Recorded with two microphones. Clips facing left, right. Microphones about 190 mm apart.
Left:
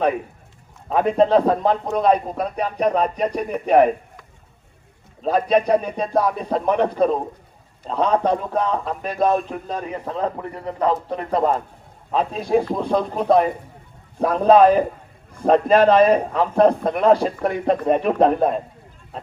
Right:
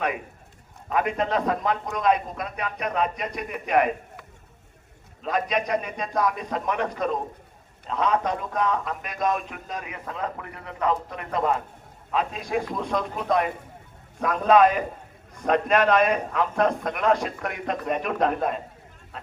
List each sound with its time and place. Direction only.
0.9 s a man's voice: 30° left (ahead or behind)
5.2 s a man's voice: 30° left (ahead or behind)